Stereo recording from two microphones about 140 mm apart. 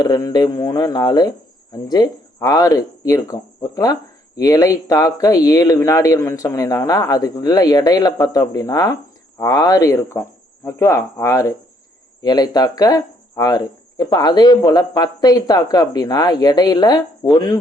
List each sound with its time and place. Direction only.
0.0 s speech: 25° left (ahead or behind)